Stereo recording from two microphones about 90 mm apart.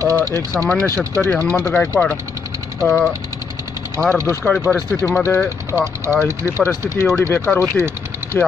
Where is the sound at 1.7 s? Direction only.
15° left (ahead or behind).